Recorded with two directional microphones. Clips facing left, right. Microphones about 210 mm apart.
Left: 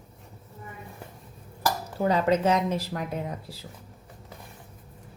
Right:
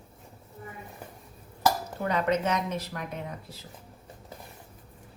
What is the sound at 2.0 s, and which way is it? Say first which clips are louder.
Speech: left 4 dB; 30° left (ahead or behind).